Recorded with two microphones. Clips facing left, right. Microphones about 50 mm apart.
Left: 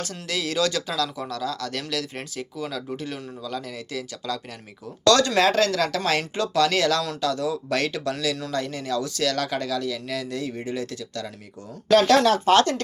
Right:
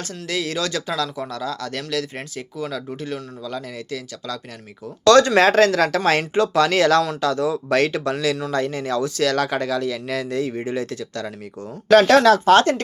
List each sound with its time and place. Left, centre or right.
0.0 s speech: centre
5.0 s speech: right
11.9 s speech: right
12.2 s speech: right
12.5 s speech: right